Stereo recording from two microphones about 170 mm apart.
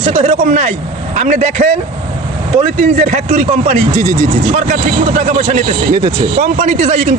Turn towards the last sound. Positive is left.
turn(degrees=-45)  # may be behind; listen again after turning